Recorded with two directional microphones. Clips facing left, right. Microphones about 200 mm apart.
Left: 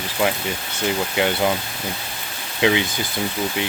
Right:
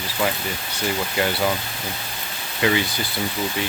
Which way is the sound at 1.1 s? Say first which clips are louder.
Left 2 dB; 20° left (ahead or behind).